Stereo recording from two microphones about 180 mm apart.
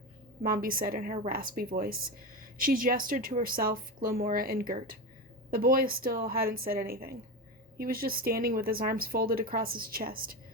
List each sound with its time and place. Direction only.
0.4 s a woman's voice: 55° right (ahead or behind)